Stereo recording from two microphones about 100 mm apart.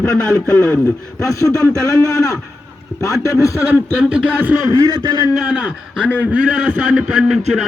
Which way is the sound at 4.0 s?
10° right (ahead or behind).